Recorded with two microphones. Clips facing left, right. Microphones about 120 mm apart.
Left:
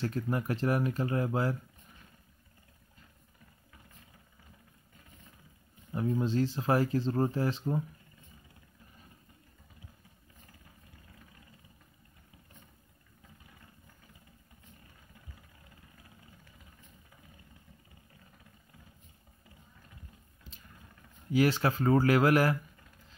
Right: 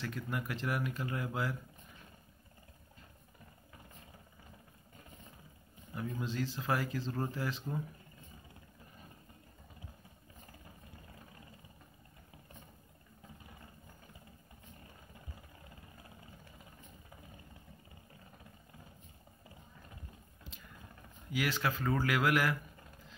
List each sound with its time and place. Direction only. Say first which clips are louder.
0.0 s speech: left 7 dB; 35° left (ahead or behind)
5.9 s speech: left 8 dB; 30° left (ahead or behind)
21.3 s speech: left 8 dB; 35° left (ahead or behind)